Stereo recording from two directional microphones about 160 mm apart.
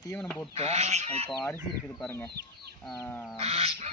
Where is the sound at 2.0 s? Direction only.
5° left (ahead or behind).